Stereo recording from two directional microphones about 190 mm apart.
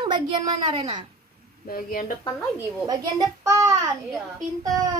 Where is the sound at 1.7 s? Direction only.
50° left (ahead or behind).